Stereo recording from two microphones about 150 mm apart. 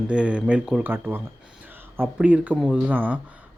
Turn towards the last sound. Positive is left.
turn(degrees=-10)  # may be behind; listen again after turning